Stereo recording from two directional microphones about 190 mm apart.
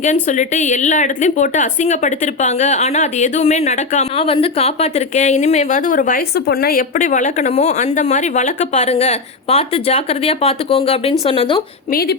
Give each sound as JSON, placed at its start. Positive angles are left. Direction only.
{"t": 0.0, "sound": "a woman's voice", "side_deg": 40}
{"t": 11.9, "sound": "speech", "side_deg": 50}